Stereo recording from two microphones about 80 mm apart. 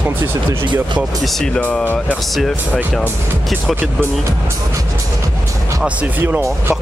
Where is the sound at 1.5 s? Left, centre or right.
Centre.